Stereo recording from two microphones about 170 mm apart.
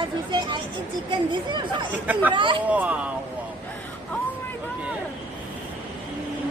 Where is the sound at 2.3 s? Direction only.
30° right (ahead or behind).